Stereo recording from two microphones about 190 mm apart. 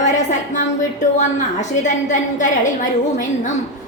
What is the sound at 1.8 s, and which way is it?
Speech, 40° left (ahead or behind).